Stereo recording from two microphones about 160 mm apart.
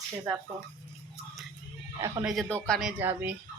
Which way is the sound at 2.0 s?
20° right (ahead or behind).